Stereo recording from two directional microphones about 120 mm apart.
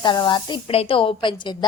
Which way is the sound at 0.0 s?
40° left (ahead or behind).